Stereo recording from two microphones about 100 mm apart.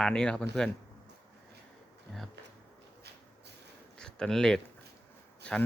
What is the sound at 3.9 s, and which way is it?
Speech, 10° left (ahead or behind).